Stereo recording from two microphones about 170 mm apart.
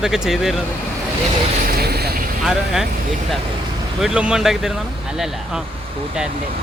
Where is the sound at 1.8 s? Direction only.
70° right (ahead or behind).